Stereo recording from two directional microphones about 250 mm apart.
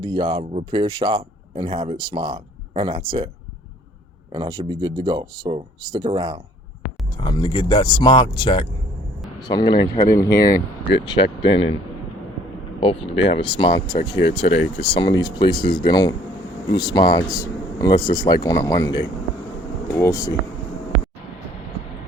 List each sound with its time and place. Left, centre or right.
0.0 s speech: centre
4.3 s speech: centre
7.2 s speech: centre
12.8 s speech: left